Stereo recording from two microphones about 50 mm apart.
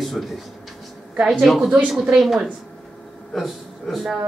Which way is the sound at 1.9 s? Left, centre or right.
Centre.